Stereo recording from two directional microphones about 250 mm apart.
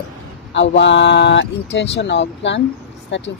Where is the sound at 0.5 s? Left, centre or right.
Left.